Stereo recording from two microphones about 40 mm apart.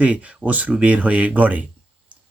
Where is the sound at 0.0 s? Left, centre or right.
Right.